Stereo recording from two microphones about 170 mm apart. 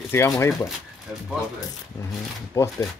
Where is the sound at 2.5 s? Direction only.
15° left (ahead or behind).